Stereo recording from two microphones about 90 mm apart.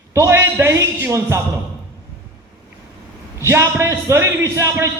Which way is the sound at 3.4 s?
30° right (ahead or behind).